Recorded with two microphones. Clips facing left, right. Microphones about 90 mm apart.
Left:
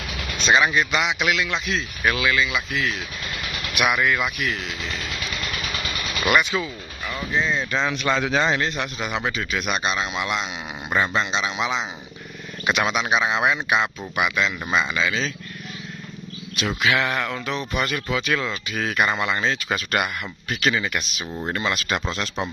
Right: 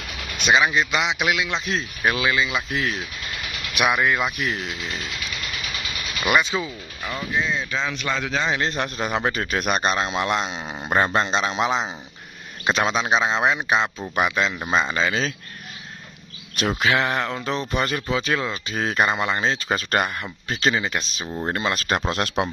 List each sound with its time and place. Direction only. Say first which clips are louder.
0.5 s speech: even; 20° right (ahead or behind)
3.7 s speech: right 1 dB; 20° right (ahead or behind)
6.2 s speech: even; 15° right (ahead or behind)
7.3 s speech: left 2 dB; centre (ahead or behind)
8.5 s speech: right 1 dB; 35° right (ahead or behind)
14.1 s speech: right 1 dB; 35° right (ahead or behind)
16.5 s speech: right 1 dB; 40° right (ahead or behind)